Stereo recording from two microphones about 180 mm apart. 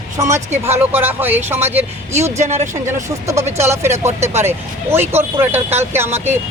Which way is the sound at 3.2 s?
15° right (ahead or behind).